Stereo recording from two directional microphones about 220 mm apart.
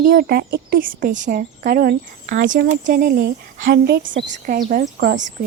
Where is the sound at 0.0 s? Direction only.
45° right (ahead or behind).